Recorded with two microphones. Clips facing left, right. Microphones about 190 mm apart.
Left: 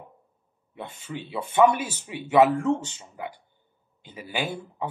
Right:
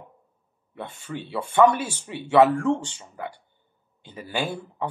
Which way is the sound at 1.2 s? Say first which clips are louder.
Right 1 dB; 15° left (ahead or behind).